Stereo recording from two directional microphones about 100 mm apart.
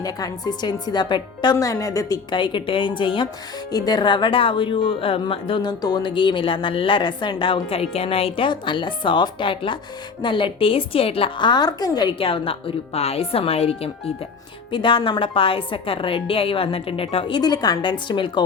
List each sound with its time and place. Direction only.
0.0 s a woman's voice: 40° left (ahead or behind)
1.5 s a woman's voice: 35° left (ahead or behind); by 3.2 s 55° left (ahead or behind)
3.7 s a woman's voice: 40° left (ahead or behind); by 5.7 s 60° left (ahead or behind)
5.8 s a woman's voice: 45° left (ahead or behind)
12.2 s speech: 65° left (ahead or behind); by 13.9 s 90° left
14.7 s a woman's voice: 55° left (ahead or behind)